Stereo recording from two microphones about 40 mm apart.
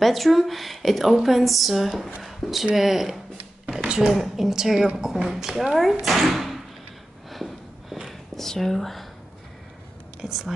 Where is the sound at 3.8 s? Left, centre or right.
Right.